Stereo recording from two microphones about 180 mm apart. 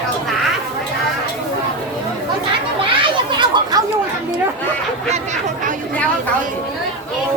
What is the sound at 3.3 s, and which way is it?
Chatter, 25° right (ahead or behind).